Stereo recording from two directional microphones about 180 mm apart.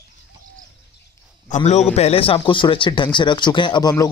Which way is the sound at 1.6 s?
35° left (ahead or behind).